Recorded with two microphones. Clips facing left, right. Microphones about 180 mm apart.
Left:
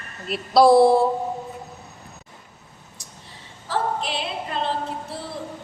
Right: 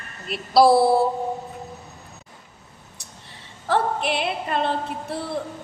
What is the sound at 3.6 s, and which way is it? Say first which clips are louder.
Female singing: right 3 dB; 60° right (ahead or behind).